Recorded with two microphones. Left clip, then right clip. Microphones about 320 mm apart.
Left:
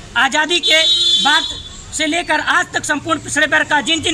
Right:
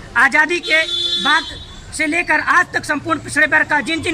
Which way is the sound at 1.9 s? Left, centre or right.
Centre.